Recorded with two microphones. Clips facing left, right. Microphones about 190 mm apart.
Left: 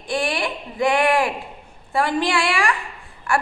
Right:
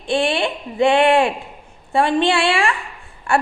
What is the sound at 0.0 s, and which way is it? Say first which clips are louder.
A woman's voice: right 5 dB; 25° right (ahead or behind).